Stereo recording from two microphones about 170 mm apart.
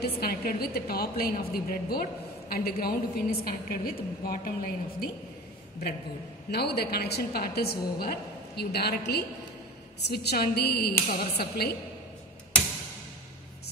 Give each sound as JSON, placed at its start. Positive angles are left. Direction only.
{"t": 0.0, "sound": "a woman's voice", "side_deg": 60}
{"t": 6.5, "sound": "a woman's voice", "side_deg": 75}